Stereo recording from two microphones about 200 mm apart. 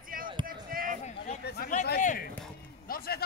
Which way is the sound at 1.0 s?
35° left (ahead or behind).